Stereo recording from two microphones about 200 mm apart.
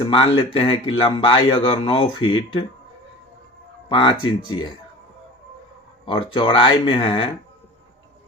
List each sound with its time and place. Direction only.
0.0 s speech: 25° left (ahead or behind)
3.8 s speech: 25° left (ahead or behind)
6.1 s speech: 25° left (ahead or behind)